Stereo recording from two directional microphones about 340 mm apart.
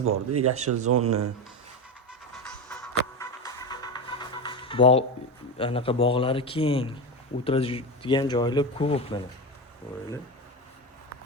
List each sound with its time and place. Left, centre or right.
0.0 s speech: right
2.4 s music: centre
5.5 s speech: centre